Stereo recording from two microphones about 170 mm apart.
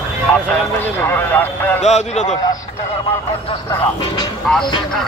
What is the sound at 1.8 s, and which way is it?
Speech, 40° left (ahead or behind).